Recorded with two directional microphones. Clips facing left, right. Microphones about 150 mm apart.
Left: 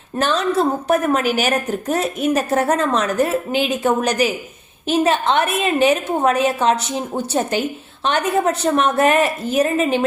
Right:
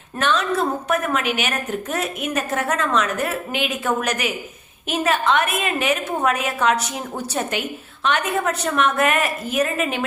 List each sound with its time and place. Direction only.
0.2 s a woman's voice: 35° left (ahead or behind)